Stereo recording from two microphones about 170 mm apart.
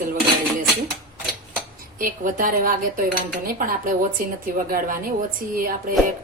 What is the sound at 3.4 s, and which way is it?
A woman's voice, 55° right (ahead or behind).